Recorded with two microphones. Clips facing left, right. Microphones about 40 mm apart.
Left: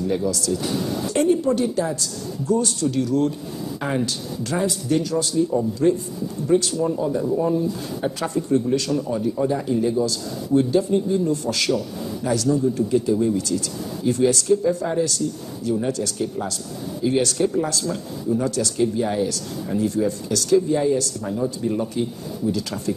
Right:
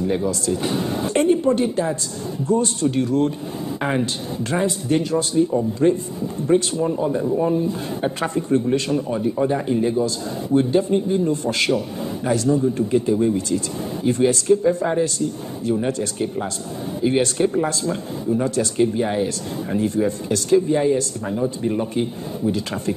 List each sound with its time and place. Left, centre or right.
0.0 s speech: right